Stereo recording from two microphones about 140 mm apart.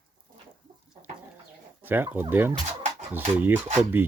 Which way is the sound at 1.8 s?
15° right (ahead or behind).